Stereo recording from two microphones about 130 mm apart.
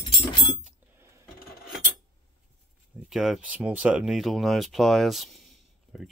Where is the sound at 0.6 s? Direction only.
15° right (ahead or behind).